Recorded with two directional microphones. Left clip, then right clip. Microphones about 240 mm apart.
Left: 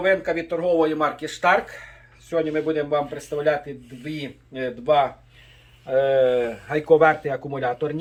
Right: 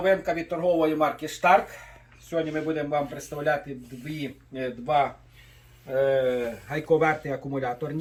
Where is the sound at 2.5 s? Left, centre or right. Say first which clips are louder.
Left 5 dB; left.